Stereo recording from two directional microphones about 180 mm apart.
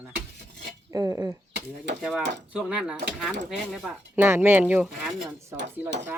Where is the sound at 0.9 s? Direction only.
20° right (ahead or behind).